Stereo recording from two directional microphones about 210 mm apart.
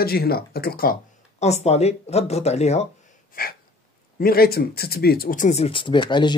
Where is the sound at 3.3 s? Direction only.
45° left (ahead or behind).